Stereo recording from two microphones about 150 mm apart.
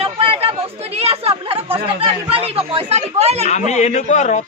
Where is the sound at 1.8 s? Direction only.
40° right (ahead or behind).